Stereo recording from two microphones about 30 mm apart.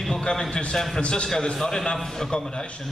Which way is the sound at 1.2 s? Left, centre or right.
Left.